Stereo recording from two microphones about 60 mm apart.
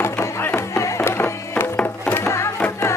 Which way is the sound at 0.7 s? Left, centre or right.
Left.